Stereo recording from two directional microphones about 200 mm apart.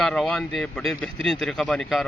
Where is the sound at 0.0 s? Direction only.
5° left (ahead or behind).